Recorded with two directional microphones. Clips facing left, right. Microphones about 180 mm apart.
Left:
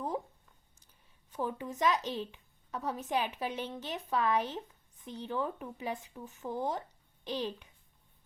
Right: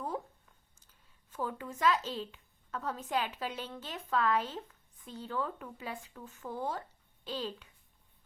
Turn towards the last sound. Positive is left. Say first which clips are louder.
# left 2 dB
turn(degrees=20)  # may be behind; listen again after turning